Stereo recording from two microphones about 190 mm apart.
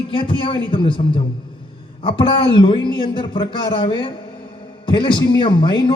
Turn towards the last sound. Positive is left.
turn(degrees=25)  # may be behind; listen again after turning